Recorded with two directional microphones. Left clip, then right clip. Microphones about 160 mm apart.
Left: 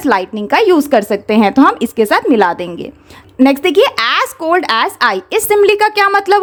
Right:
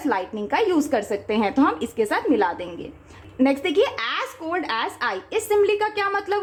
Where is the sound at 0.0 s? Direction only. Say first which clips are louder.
Left 11 dB; 40° left (ahead or behind).